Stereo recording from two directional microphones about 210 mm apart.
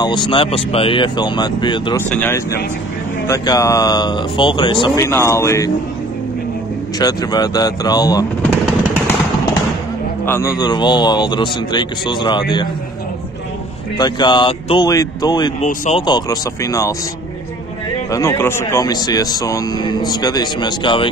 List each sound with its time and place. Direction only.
0.0 s speech: 20° left (ahead or behind)
2.0 s speech: 10° left (ahead or behind)
7.0 s speech: 20° left (ahead or behind)
8.4 s a sound: 5° left (ahead or behind)
10.2 s speech: 15° left (ahead or behind)
13.9 s speech: 20° left (ahead or behind)
15.6 s speech: 35° left (ahead or behind)
16.1 s speech: 15° left (ahead or behind)
18.1 s speech: 10° left (ahead or behind)